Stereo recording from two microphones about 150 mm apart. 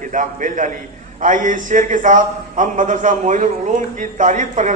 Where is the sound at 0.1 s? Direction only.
60° right (ahead or behind).